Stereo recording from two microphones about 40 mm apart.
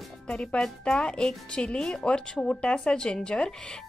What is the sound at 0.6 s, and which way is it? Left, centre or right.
A woman's voice, centre.